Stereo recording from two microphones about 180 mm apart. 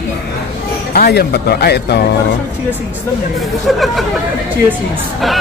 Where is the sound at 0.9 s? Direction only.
60° left (ahead or behind).